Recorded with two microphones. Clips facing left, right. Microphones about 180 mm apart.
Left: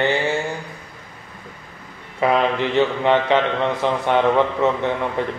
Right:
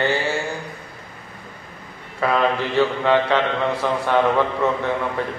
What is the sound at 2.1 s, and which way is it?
A man's voice, 20° left (ahead or behind).